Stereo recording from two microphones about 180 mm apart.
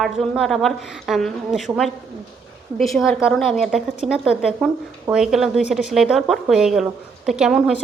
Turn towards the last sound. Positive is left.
turn(degrees=-5)  # may be behind; listen again after turning